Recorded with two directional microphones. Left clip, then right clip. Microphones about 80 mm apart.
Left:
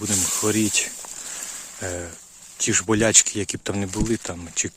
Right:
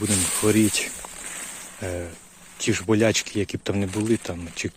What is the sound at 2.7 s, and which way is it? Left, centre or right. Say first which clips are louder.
Speech: even; left.